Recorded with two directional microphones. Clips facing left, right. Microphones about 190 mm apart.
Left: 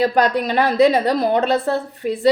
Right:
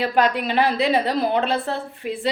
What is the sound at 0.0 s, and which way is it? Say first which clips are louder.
Speech: left 3 dB; 40° left (ahead or behind).